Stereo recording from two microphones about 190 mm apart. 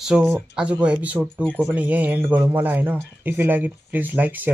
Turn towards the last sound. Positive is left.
turn(degrees=-10)  # may be behind; listen again after turning